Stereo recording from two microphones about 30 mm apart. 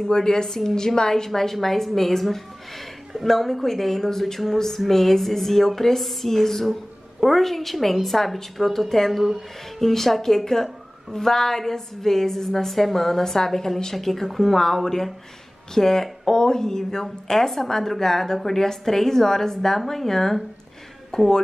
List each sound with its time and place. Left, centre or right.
0.0 s a woman's voice: left
16.3 s a woman's voice: left